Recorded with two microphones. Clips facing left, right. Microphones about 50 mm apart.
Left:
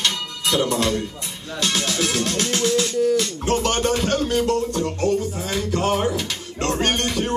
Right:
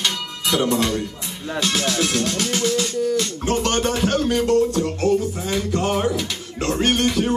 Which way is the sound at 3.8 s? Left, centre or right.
Centre.